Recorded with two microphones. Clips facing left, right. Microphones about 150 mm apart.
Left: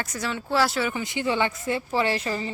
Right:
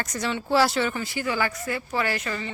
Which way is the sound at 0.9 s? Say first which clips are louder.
Left 2 dB; 20° left (ahead or behind).